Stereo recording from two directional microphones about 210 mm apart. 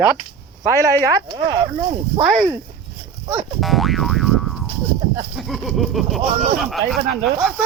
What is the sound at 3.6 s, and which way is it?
Boing, centre (ahead or behind).